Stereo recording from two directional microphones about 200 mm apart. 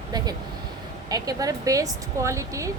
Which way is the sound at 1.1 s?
15° right (ahead or behind).